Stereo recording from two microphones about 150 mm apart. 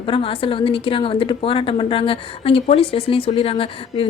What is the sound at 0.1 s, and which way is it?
A woman's voice, 35° left (ahead or behind).